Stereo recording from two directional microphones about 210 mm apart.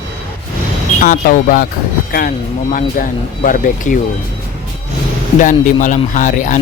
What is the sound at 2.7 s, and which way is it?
Speech, 40° left (ahead or behind).